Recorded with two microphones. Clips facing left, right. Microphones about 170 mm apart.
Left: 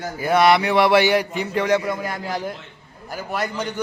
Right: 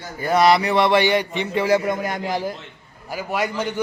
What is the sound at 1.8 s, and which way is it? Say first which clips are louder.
A man's voice: right 2 dB; 20° right (ahead or behind).